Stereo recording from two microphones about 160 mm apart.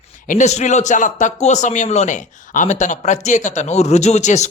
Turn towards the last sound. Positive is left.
turn(degrees=45)  # may be behind; listen again after turning